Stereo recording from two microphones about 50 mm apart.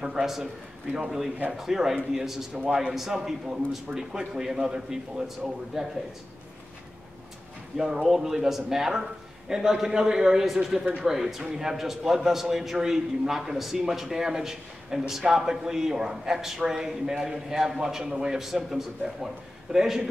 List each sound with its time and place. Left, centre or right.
0.0 s a man's voice: centre
7.7 s a man's voice: centre